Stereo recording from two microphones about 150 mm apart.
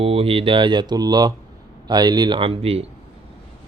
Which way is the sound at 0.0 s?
40° right (ahead or behind).